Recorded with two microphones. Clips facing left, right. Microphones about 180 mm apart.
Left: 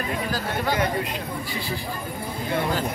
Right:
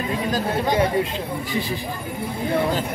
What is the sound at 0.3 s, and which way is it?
Speech, 20° right (ahead or behind).